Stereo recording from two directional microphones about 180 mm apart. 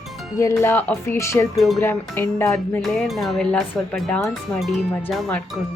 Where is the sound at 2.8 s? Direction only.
Centre (ahead or behind).